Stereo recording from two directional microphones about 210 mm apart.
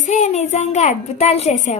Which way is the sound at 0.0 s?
35° left (ahead or behind).